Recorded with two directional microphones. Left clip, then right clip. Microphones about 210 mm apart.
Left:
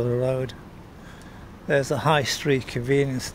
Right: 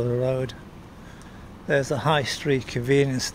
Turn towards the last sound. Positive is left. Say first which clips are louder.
# right 1 dB
turn(degrees=-5)  # may be behind; listen again after turning